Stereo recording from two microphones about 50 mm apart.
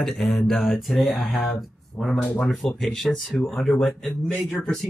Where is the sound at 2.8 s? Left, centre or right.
Centre.